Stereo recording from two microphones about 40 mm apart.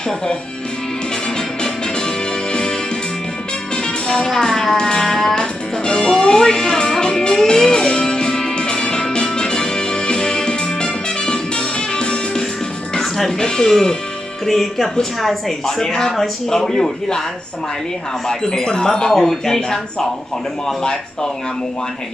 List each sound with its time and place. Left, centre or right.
1.4 s music: centre
3.8 s music: centre
13.2 s speech: centre
18.3 s speech: centre